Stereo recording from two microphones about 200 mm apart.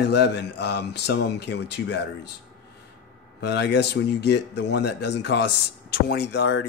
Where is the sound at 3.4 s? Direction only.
60° left (ahead or behind).